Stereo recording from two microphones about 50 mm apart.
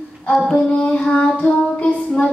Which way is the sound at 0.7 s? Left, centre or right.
Left.